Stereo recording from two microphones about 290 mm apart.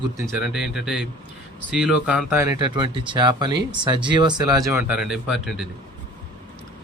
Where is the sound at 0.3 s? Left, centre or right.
Centre.